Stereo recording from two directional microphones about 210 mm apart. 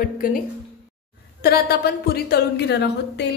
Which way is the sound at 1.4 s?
45° left (ahead or behind).